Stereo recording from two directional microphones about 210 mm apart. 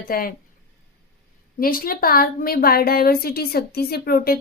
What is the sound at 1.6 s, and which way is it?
Speech, 45° left (ahead or behind).